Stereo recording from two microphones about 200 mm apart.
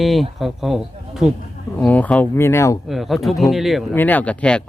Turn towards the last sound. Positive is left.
turn(degrees=5)  # may be behind; listen again after turning